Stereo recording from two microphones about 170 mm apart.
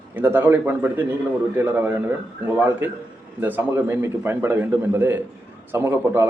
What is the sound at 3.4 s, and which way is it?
Speech, 10° right (ahead or behind).